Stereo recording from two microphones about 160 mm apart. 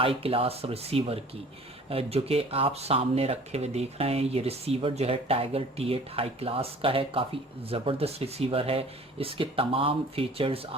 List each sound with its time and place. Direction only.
0.0 s speech: 35° right (ahead or behind)